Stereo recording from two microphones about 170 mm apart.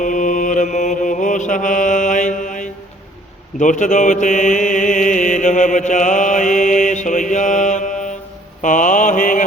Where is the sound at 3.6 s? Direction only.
45° left (ahead or behind).